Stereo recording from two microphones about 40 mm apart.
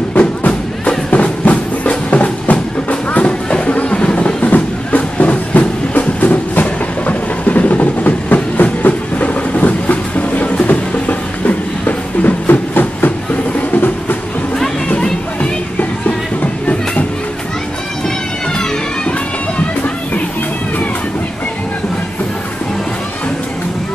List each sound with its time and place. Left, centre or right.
1.1 s train: left
10.6 s music: left
13.6 s train: left